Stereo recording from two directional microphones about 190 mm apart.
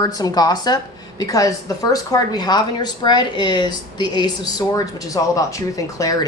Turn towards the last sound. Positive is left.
turn(degrees=20)  # may be behind; listen again after turning